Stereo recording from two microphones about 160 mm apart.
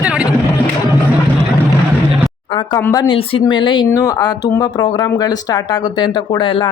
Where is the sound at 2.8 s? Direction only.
15° left (ahead or behind).